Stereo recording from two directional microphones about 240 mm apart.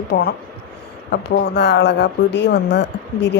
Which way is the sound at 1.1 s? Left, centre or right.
Left.